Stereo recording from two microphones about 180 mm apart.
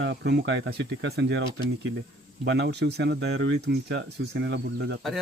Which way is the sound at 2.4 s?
70° right (ahead or behind).